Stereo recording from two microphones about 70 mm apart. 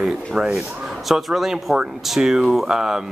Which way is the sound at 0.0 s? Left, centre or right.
Centre.